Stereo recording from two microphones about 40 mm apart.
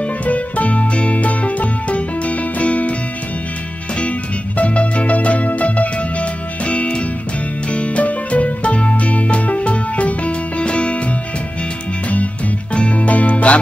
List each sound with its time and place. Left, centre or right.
0.0 s music: left
4.0 s music: left
12.7 s music: left